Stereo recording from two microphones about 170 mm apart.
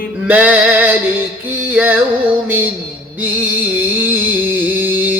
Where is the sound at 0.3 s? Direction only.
10° right (ahead or behind).